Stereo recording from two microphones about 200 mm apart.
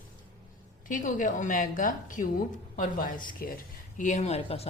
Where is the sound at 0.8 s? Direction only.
40° left (ahead or behind).